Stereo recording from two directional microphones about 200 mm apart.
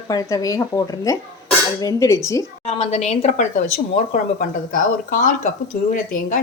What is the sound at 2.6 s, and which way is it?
A woman's voice, 35° left (ahead or behind).